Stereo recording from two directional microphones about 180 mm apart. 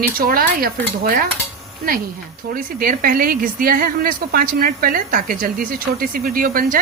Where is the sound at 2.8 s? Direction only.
50° right (ahead or behind).